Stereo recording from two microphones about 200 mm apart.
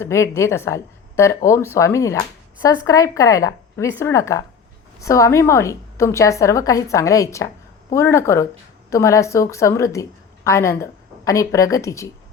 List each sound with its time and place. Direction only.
0.0 s speech: 15° left (ahead or behind)